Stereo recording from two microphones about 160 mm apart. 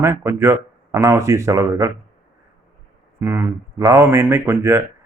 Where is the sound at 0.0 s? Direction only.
15° right (ahead or behind).